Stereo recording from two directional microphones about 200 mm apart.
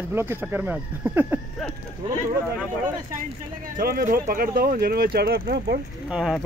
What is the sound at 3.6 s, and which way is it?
Speech, 45° right (ahead or behind).